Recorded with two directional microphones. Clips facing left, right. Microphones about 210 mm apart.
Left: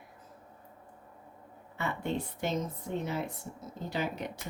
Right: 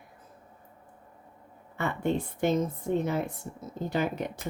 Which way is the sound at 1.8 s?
50° right (ahead or behind).